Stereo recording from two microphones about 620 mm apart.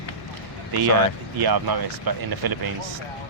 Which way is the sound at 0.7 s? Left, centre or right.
Right.